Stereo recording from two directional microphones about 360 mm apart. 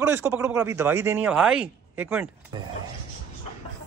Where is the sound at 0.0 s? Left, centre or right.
Centre.